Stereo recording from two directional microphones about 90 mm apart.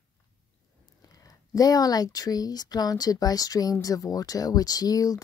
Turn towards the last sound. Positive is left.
turn(degrees=40)  # may be behind; listen again after turning